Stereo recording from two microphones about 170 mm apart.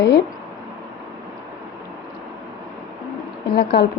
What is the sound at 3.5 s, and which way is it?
Speech, 70° left (ahead or behind).